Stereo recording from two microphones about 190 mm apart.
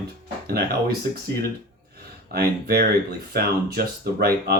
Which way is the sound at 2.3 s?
55° right (ahead or behind).